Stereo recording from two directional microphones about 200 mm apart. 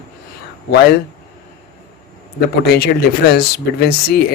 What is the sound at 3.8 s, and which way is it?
Speech, 50° left (ahead or behind).